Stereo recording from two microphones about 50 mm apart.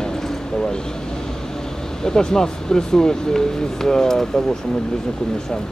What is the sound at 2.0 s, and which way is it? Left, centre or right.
Speech, centre.